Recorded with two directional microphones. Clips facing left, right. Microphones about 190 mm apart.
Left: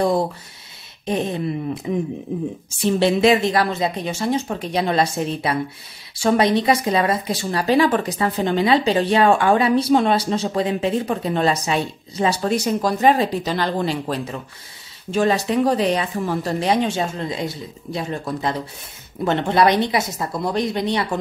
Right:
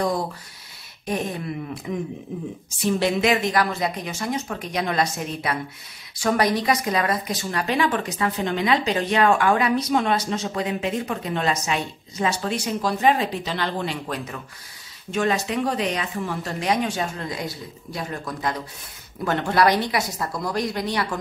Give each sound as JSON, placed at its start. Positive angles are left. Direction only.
{"t": 1.0, "sound": "speech", "side_deg": 25}